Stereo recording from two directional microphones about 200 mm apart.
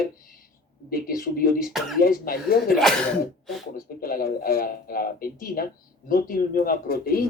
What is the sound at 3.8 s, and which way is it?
Speech, 45° left (ahead or behind).